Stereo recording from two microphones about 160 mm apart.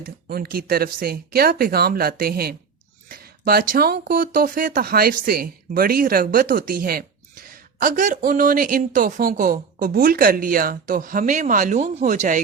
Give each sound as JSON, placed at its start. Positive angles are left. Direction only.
{"t": 0.0, "sound": "a man's voice", "side_deg": -70}
{"t": 7.5, "sound": "a man's voice", "side_deg": -55}